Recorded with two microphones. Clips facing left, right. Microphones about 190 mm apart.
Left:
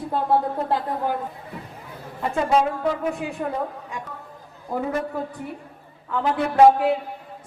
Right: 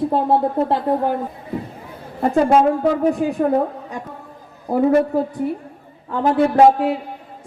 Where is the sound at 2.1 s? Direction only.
40° right (ahead or behind).